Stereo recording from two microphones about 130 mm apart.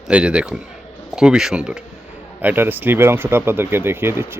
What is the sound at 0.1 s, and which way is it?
Speech, 10° right (ahead or behind).